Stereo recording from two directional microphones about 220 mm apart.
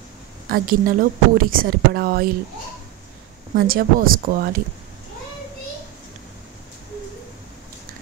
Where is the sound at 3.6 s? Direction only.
40° right (ahead or behind).